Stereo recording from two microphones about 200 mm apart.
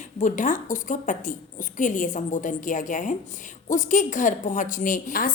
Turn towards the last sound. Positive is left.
turn(degrees=45)  # may be behind; listen again after turning